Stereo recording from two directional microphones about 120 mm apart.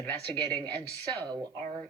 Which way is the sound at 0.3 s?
35° right (ahead or behind).